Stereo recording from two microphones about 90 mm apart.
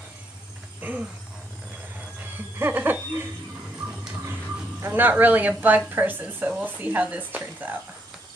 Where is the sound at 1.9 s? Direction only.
20° right (ahead or behind).